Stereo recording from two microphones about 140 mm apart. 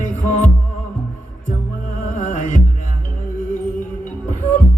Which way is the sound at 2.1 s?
60° left (ahead or behind).